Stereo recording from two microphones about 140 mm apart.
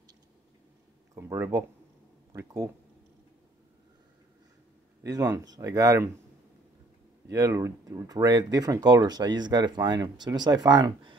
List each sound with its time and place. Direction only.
1.1 s a sound: 20° right (ahead or behind)
2.3 s speech: 20° right (ahead or behind)
5.0 s speech: 25° right (ahead or behind)
7.2 s speech: 20° right (ahead or behind)